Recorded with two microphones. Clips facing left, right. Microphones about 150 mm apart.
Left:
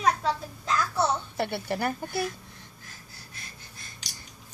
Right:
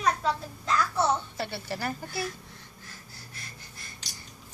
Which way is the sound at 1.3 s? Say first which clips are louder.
Left 5 dB; 55° left (ahead or behind).